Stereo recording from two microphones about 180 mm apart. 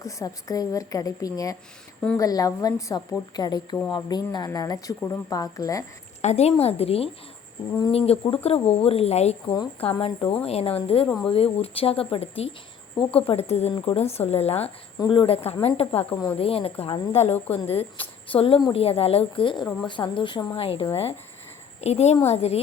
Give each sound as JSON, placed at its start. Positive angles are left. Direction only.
{"t": 0.0, "sound": "speech", "side_deg": 20}
{"t": 6.2, "sound": "speech", "side_deg": 35}
{"t": 14.9, "sound": "a woman's voice", "side_deg": 25}